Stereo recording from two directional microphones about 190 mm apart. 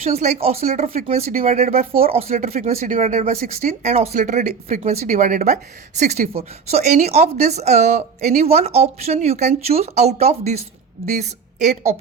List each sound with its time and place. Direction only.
0.1 s a woman's voice: 35° right (ahead or behind)
2.0 s a woman's voice: 35° right (ahead or behind)